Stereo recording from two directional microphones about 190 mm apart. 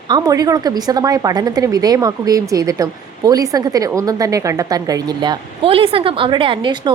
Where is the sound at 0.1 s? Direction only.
20° right (ahead or behind).